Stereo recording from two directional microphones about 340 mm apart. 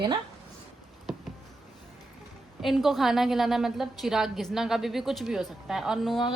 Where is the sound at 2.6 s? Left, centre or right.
Centre.